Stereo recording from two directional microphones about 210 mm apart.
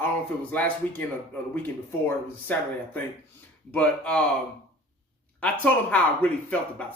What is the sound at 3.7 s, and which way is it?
Speech, 5° left (ahead or behind).